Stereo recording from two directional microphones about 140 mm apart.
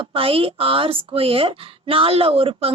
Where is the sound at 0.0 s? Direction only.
40° right (ahead or behind).